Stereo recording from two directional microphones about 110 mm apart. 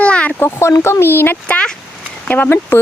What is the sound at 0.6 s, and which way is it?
Speech, 25° left (ahead or behind).